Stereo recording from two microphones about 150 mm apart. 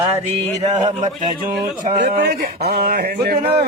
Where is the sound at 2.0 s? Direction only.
90° right.